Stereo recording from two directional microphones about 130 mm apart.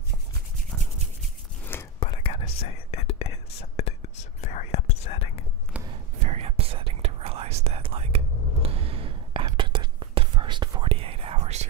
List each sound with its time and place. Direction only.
2.0 s whispering: 45° left (ahead or behind)
6.1 s whispering: 55° right (ahead or behind)